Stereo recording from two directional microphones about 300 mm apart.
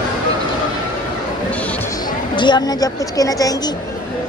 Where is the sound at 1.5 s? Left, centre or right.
Centre.